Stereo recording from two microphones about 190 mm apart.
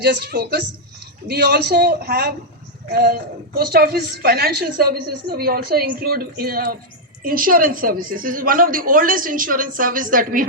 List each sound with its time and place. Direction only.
0.0 s a woman's voice: 60° right (ahead or behind)